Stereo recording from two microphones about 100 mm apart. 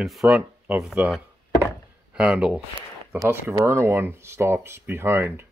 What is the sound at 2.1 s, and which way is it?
Speech, 10° right (ahead or behind).